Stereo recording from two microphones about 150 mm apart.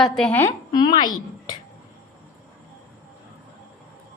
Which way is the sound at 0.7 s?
30° left (ahead or behind).